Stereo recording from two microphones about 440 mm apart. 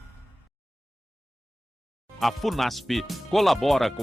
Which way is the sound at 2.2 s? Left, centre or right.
Centre.